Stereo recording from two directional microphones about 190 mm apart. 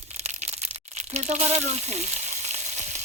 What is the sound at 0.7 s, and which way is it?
Frying, 35° right (ahead or behind).